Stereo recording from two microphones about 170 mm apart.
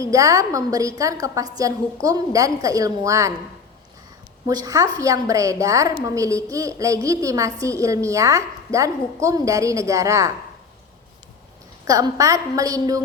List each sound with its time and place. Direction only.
0.0 s a woman's voice: 20° right (ahead or behind)
4.4 s a woman's voice: 20° right (ahead or behind)
11.9 s a woman's voice: 20° right (ahead or behind)